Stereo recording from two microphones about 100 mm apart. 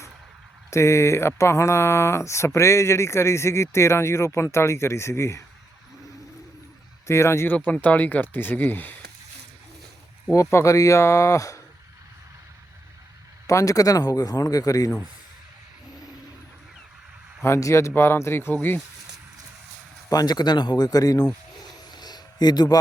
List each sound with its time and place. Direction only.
0.7 s speech: 30° left (ahead or behind)
7.1 s speech: 25° left (ahead or behind)
10.3 s speech: 30° left (ahead or behind)
13.5 s speech: 30° left (ahead or behind)
17.4 s speech: 30° left (ahead or behind)
20.1 s speech: 40° left (ahead or behind)
21.9 s a sound: 45° left (ahead or behind)